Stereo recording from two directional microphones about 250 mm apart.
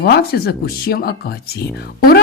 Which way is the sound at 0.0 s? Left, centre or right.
Left.